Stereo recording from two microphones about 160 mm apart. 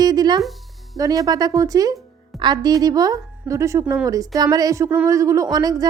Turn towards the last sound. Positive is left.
turn(degrees=-25)  # may be behind; listen again after turning